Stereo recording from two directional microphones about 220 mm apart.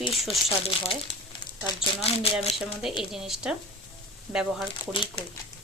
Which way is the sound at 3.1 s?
Centre (ahead or behind).